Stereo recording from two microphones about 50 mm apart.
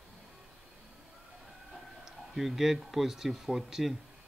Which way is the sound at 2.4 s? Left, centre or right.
Centre.